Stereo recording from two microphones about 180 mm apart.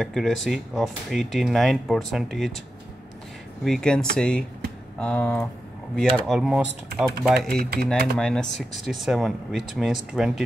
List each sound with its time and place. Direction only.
0.0 s speech: centre (ahead or behind)
3.6 s speech: 5° left (ahead or behind)
7.5 s speech: 60° right (ahead or behind)
8.2 s speech: 5° left (ahead or behind)